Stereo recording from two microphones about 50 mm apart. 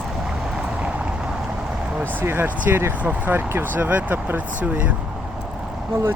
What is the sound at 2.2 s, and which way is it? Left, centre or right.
Speech, right.